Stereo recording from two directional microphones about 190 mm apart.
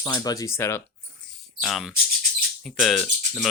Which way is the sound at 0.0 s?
20° left (ahead or behind).